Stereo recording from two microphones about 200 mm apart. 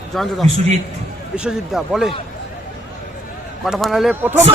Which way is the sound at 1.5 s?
Centre (ahead or behind).